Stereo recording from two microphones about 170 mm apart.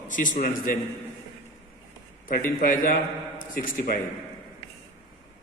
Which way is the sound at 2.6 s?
55° left (ahead or behind).